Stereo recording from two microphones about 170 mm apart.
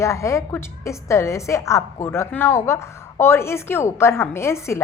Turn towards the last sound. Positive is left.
turn(degrees=15)  # may be behind; listen again after turning